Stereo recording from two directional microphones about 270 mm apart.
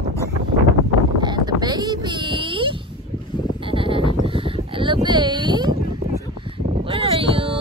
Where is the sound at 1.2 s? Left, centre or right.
Centre.